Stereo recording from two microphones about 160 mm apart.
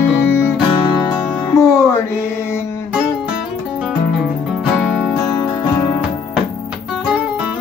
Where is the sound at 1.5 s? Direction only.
20° left (ahead or behind).